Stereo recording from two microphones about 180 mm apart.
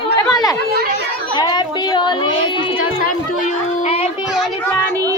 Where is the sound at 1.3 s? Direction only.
25° left (ahead or behind).